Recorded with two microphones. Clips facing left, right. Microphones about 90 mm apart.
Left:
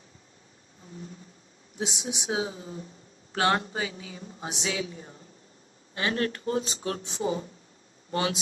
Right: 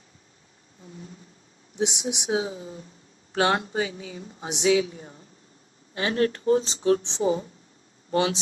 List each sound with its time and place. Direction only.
1.8 s speech: 20° right (ahead or behind)
4.8 s speech: 35° right (ahead or behind)